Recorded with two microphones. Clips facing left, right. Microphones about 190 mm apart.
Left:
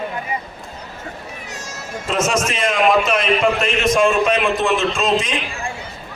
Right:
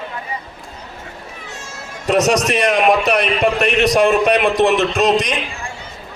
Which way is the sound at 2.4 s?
65° right (ahead or behind).